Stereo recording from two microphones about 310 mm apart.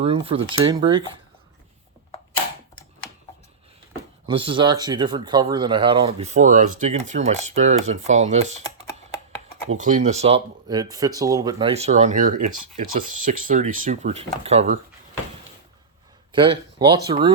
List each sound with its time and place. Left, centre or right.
0.0 s speech: centre
4.3 s speech: centre
9.7 s speech: right
16.3 s speech: centre